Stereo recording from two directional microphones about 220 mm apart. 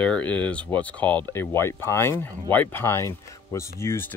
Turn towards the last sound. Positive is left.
turn(degrees=10)  # may be behind; listen again after turning